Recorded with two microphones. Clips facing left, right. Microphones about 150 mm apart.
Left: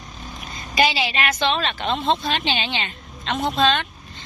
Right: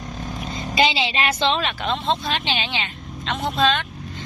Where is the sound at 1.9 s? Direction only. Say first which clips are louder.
Left 2 dB; centre (ahead or behind).